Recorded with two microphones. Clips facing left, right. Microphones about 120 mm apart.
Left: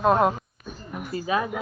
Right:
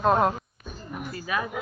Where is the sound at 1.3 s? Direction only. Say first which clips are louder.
Left 4 dB; 25° left (ahead or behind).